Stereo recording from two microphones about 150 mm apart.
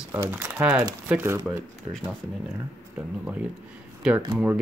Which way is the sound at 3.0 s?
5° right (ahead or behind).